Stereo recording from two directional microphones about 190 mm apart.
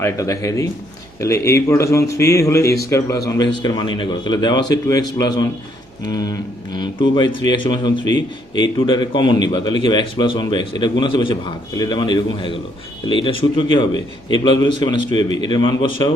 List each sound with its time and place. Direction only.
0.0 s a man's voice: 15° left (ahead or behind)